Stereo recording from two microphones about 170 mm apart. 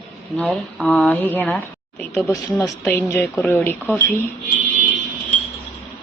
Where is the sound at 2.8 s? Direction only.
15° left (ahead or behind).